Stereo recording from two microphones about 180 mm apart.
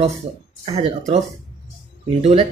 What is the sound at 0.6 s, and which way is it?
Speech, 35° right (ahead or behind).